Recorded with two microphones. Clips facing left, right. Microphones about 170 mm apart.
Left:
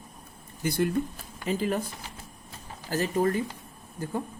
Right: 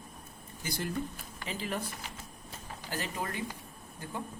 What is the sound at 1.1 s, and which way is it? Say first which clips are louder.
Speech: left 10 dB; 45° left (ahead or behind).